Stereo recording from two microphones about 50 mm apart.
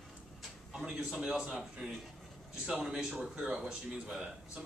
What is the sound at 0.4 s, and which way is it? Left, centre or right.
Speech, centre.